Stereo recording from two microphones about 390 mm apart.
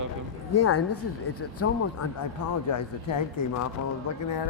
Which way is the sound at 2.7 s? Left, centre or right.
Left.